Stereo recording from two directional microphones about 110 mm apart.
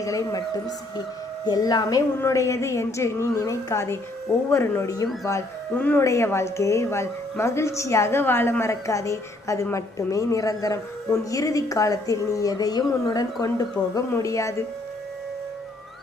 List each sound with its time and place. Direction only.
0.0 s a woman's voice: 30° left (ahead or behind)
5.7 s speech: 15° left (ahead or behind)
6.0 s a woman's voice: 25° left (ahead or behind)